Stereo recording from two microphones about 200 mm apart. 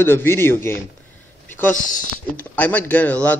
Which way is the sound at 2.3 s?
10° left (ahead or behind).